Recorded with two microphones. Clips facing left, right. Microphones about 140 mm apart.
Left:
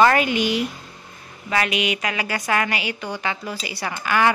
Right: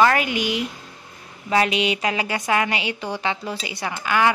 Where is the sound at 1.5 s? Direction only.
30° right (ahead or behind).